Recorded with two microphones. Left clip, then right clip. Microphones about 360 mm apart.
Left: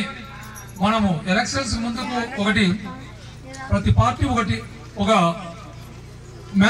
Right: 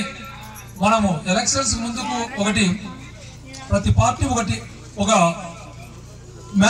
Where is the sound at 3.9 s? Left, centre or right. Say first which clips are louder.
Even; right.